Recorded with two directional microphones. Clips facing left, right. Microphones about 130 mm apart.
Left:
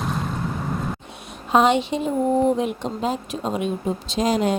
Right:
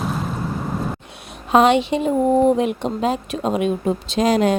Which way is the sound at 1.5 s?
70° right (ahead or behind).